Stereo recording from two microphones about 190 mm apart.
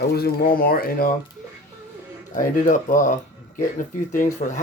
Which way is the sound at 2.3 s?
40° left (ahead or behind).